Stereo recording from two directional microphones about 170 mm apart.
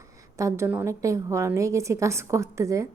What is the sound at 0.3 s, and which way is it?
A woman's voice, 15° right (ahead or behind).